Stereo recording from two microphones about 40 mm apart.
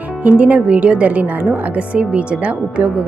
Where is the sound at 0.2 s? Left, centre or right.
Right.